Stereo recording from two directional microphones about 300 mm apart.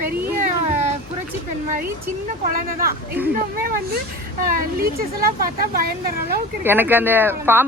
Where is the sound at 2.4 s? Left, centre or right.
Right.